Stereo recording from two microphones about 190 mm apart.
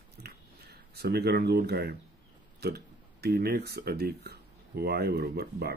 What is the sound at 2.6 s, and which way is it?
Speech, 60° right (ahead or behind).